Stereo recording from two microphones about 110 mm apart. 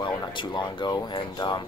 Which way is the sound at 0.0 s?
45° left (ahead or behind).